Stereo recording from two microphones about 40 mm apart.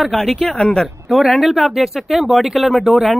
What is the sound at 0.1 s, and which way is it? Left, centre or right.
Speech, centre.